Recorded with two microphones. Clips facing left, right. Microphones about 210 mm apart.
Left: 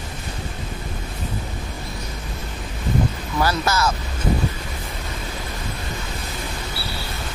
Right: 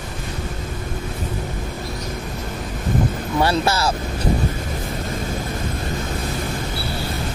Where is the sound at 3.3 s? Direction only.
30° right (ahead or behind).